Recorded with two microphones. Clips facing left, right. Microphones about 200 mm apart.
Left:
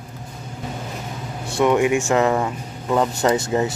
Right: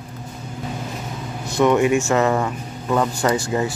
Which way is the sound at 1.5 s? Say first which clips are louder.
Right 1 dB; 10° left (ahead or behind).